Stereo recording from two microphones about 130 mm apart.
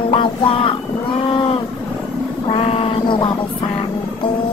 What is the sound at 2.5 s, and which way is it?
Child singing, 50° left (ahead or behind).